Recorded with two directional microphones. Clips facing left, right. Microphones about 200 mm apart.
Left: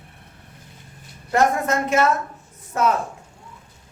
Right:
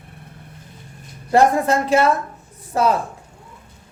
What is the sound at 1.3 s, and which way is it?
A woman's voice, 30° right (ahead or behind).